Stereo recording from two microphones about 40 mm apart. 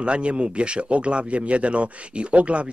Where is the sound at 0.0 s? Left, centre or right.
Right.